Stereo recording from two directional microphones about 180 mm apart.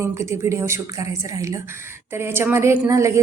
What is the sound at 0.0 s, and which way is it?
Speech, 15° right (ahead or behind).